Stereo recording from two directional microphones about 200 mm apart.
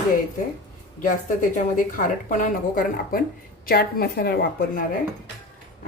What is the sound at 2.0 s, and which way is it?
A woman's voice, 40° left (ahead or behind).